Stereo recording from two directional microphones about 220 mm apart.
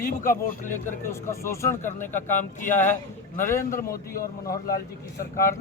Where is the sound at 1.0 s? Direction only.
10° left (ahead or behind).